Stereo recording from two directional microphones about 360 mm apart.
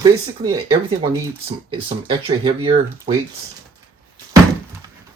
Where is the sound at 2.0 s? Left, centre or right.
Centre.